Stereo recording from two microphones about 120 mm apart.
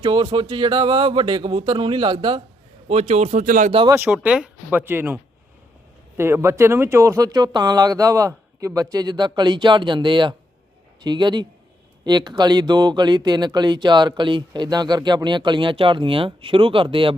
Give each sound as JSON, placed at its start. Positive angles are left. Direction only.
{"t": 0.0, "sound": "speech", "side_deg": -35}
{"t": 2.9, "sound": "speech", "side_deg": -60}
{"t": 3.8, "sound": "speech", "side_deg": -20}